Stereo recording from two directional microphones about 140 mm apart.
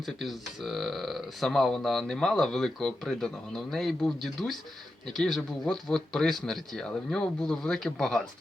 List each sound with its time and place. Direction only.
0.0 s speech: centre (ahead or behind)